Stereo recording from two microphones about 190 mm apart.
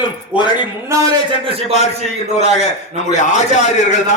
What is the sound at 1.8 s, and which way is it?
A man's voice, 35° left (ahead or behind).